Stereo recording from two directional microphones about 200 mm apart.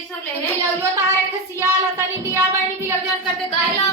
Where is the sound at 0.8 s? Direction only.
15° right (ahead or behind).